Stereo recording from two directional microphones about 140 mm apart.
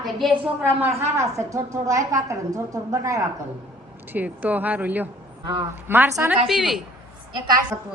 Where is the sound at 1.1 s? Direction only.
20° right (ahead or behind).